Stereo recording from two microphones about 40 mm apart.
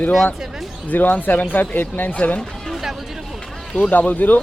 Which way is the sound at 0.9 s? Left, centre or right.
Left.